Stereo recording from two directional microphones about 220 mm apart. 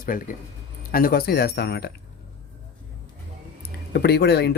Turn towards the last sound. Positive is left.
turn(degrees=50)  # may be behind; listen again after turning